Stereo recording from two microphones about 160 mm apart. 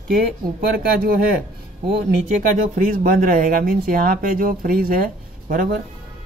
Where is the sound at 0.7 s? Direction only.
70° right (ahead or behind).